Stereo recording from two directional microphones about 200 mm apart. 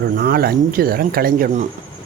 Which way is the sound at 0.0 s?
50° right (ahead or behind).